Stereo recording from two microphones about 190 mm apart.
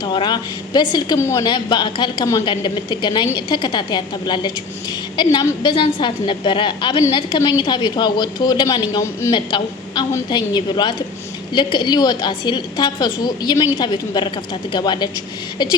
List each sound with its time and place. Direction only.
0.0 s a woman's voice: 25° left (ahead or behind)